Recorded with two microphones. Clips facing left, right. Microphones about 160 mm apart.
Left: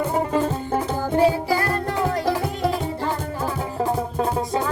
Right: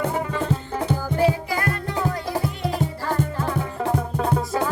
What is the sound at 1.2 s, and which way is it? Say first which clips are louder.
Music: left 3 dB; 30° left (ahead or behind).